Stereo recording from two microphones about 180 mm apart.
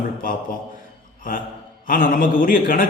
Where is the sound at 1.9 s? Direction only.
50° left (ahead or behind).